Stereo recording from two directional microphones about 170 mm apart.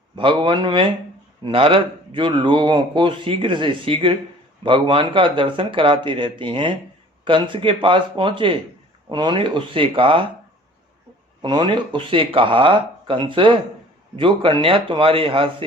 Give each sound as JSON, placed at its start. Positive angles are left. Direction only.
{"t": 0.2, "sound": "a man's voice", "side_deg": -30}
{"t": 11.4, "sound": "a man's voice", "side_deg": -25}